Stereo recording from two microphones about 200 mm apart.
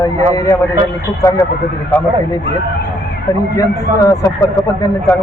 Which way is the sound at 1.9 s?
10° left (ahead or behind).